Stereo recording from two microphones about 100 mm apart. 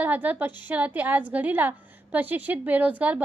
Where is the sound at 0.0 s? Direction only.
15° right (ahead or behind).